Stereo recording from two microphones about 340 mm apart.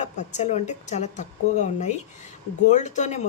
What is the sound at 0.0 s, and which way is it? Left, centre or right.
Speech, left.